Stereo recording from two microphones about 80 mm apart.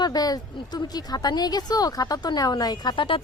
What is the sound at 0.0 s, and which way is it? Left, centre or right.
Speech, left.